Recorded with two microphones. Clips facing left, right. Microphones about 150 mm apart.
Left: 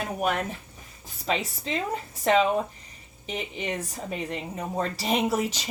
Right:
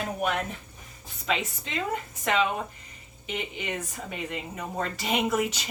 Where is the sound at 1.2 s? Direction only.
35° left (ahead or behind).